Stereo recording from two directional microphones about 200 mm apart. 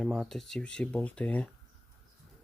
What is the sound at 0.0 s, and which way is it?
Speech, centre (ahead or behind).